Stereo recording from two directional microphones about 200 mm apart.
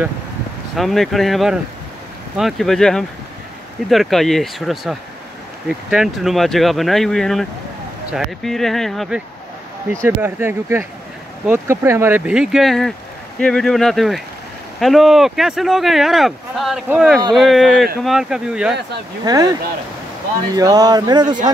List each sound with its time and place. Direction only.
0.7 s speech: centre (ahead or behind)
10.0 s speech: 10° right (ahead or behind)
19.2 s speech: 20° right (ahead or behind)
20.5 s speech: 20° right (ahead or behind)